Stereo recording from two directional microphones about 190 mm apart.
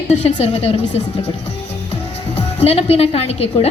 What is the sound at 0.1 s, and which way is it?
Speech, 35° left (ahead or behind).